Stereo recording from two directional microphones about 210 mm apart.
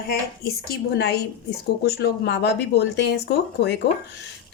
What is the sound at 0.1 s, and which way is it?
A woman's voice, 50° left (ahead or behind).